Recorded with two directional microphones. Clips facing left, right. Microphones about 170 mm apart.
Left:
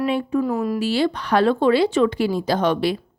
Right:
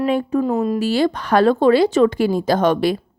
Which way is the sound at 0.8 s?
45° right (ahead or behind).